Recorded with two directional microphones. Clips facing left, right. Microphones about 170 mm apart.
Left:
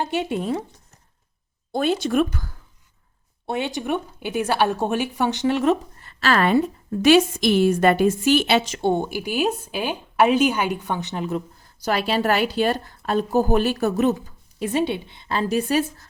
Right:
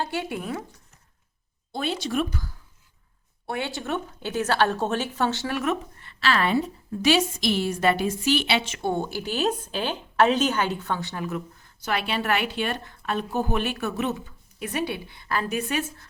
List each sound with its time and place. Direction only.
0.0 s a woman's voice: 20° left (ahead or behind)
1.7 s a woman's voice: 50° left (ahead or behind)
3.4 s a woman's voice: 20° left (ahead or behind)
6.0 s a woman's voice: 45° left (ahead or behind)
8.8 s a woman's voice: 20° left (ahead or behind); by 14.7 s 40° left (ahead or behind)
14.7 s a woman's voice: 25° left (ahead or behind)